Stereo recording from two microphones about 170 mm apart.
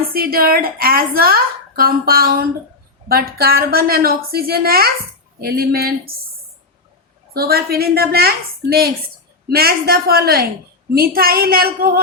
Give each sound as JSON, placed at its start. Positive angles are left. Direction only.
{"t": 0.1, "sound": "a woman's voice", "side_deg": -60}
{"t": 7.3, "sound": "a woman's voice", "side_deg": -65}